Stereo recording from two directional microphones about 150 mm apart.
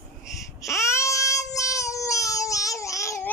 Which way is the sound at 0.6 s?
20° left (ahead or behind).